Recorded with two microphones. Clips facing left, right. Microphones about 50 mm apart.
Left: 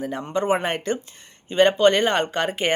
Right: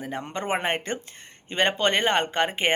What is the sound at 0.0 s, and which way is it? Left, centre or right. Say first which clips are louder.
Speech: left 6 dB; right.